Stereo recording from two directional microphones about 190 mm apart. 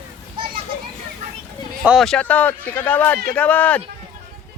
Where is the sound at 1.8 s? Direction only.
5° right (ahead or behind).